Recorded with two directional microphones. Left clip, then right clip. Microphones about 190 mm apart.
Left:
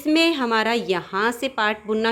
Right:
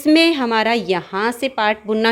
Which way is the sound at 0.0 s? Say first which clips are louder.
Right 5 dB; 15° right (ahead or behind).